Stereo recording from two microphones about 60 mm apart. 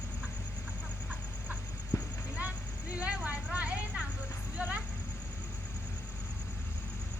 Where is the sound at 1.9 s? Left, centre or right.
Left.